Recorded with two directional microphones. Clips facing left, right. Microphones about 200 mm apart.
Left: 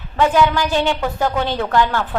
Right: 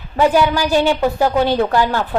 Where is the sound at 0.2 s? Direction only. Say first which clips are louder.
Right 1 dB; 10° right (ahead or behind).